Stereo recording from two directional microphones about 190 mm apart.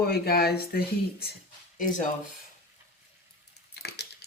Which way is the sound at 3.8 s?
60° left (ahead or behind).